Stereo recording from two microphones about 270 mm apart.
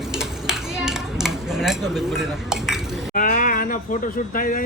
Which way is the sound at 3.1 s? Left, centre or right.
Left.